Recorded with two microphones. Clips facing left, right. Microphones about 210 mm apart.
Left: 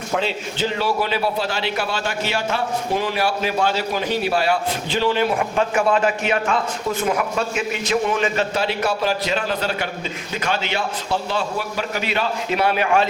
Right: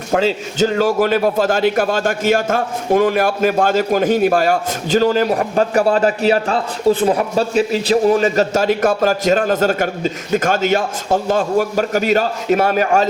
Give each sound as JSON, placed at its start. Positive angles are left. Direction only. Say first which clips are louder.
{"t": 0.1, "sound": "a man's voice", "louder": "right 7 dB", "side_deg": -45}